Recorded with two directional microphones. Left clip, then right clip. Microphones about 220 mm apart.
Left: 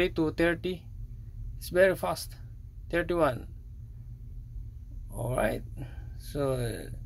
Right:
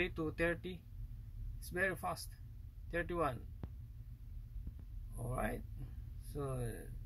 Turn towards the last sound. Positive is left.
turn(degrees=45)  # may be behind; listen again after turning